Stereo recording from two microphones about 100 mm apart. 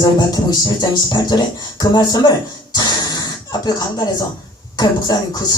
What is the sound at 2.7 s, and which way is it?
Throat clearing, 40° left (ahead or behind).